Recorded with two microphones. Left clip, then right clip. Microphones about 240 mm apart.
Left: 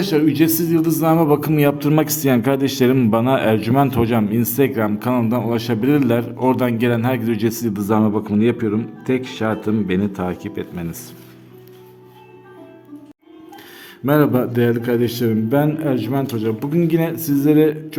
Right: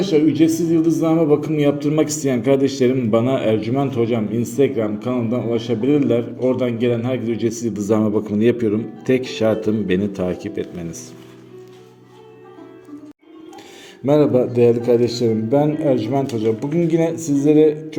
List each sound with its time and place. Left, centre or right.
0.0 s a man's voice: left; by 10.8 s centre
14.8 s a man's voice: left